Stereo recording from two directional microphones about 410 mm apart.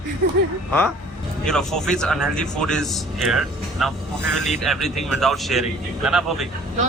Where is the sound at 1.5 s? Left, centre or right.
Centre.